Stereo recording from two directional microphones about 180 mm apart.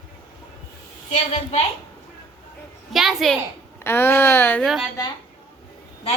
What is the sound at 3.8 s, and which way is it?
Speech, 15° left (ahead or behind).